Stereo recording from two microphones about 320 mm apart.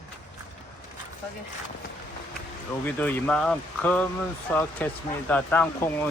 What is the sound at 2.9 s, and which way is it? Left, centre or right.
Speech, centre.